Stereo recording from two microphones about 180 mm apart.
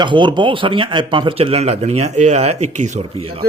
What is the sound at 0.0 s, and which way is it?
Speech, 25° right (ahead or behind).